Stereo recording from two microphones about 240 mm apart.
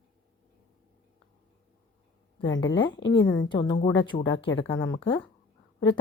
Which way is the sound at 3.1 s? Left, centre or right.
Centre.